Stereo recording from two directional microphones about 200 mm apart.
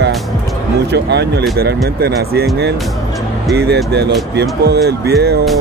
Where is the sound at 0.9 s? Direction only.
55° right (ahead or behind).